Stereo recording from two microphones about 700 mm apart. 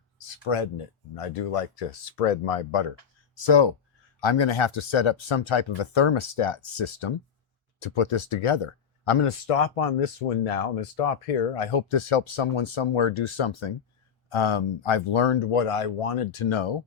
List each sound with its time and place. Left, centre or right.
0.5 s speech: left
3.3 s speech: left